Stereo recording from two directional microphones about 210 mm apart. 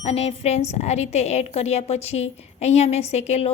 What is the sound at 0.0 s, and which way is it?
A woman's voice, 30° left (ahead or behind).